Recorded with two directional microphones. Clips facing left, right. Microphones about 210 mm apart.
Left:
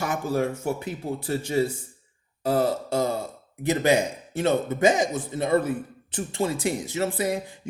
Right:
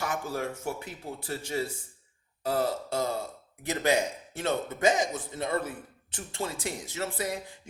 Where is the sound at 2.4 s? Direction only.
20° left (ahead or behind).